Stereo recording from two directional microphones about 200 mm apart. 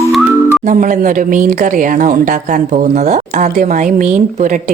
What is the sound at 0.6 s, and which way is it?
A woman's voice, 40° right (ahead or behind).